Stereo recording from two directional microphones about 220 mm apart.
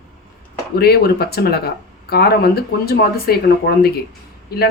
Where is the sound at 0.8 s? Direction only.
45° left (ahead or behind).